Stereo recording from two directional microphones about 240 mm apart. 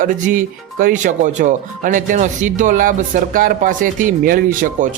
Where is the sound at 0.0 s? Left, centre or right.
Right.